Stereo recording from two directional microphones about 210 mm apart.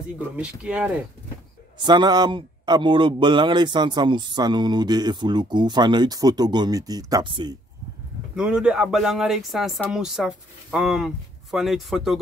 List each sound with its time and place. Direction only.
0.4 s speech: 5° right (ahead or behind)
1.8 s a man's voice: 20° right (ahead or behind)
8.4 s speech: 5° right (ahead or behind)